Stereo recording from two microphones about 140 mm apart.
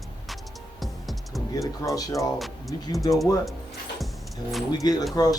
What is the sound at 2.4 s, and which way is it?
Music, centre (ahead or behind).